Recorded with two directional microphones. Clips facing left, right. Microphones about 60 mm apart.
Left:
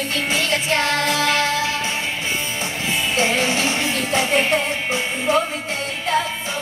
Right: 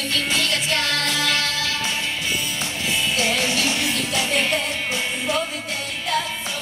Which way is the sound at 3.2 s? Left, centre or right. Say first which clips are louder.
Left 5 dB; left.